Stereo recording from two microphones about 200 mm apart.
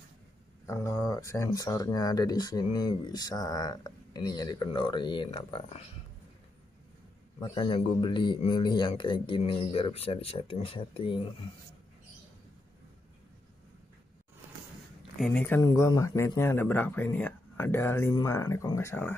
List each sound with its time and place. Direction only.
0.7 s speech: 15° left (ahead or behind)
7.3 s speech: 25° left (ahead or behind)
15.1 s speech: 5° left (ahead or behind)